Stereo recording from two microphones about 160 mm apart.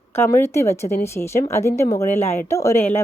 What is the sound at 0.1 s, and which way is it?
Speech, 15° left (ahead or behind).